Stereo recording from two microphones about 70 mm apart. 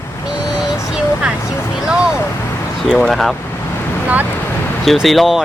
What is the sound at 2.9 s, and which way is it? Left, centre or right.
Speech, centre.